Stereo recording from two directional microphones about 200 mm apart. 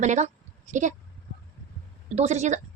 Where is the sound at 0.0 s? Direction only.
35° right (ahead or behind).